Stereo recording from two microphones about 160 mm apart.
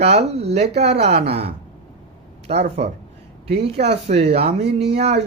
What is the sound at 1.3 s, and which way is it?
Speech, 40° right (ahead or behind).